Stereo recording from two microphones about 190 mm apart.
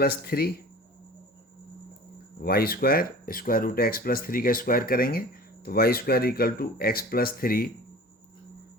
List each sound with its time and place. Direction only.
0.0 s speech: 55° left (ahead or behind)
2.4 s speech: 55° left (ahead or behind)